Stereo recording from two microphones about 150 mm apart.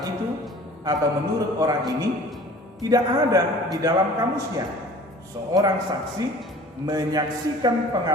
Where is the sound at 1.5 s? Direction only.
25° right (ahead or behind).